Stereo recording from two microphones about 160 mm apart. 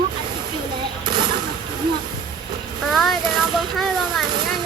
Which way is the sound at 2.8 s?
Centre (ahead or behind).